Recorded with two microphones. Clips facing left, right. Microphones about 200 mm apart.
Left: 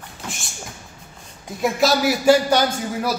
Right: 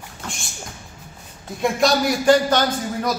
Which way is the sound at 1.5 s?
5° left (ahead or behind).